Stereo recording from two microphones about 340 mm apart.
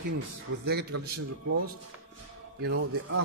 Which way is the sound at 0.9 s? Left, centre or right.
Right.